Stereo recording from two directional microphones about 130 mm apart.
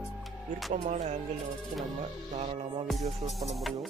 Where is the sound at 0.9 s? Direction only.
65° right (ahead or behind).